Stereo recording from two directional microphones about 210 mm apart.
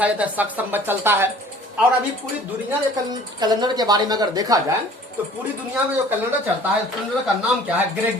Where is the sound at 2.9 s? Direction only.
20° right (ahead or behind).